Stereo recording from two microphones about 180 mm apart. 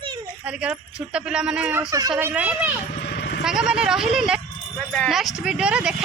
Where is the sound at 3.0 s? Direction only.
60° left (ahead or behind).